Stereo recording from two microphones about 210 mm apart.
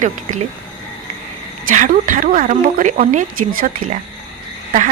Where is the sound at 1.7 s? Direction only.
40° right (ahead or behind).